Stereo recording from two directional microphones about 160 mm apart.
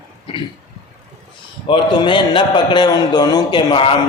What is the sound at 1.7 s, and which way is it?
A man's voice, 30° left (ahead or behind).